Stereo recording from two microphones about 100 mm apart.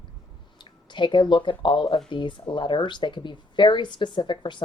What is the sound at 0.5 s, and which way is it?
Speech, 50° left (ahead or behind).